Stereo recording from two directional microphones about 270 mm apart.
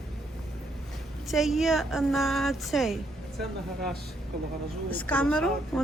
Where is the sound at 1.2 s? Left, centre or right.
Centre.